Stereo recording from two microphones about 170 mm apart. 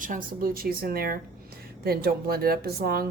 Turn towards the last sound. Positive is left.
turn(degrees=-60)  # may be behind; listen again after turning